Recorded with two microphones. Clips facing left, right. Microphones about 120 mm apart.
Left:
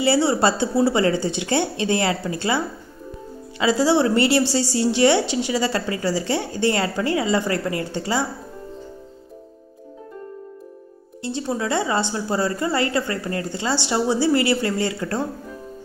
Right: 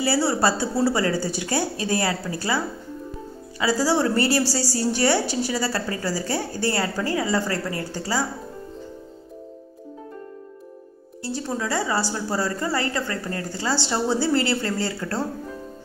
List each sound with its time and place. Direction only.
0.0 s a woman's voice: 20° left (ahead or behind)
11.2 s a woman's voice: 20° left (ahead or behind)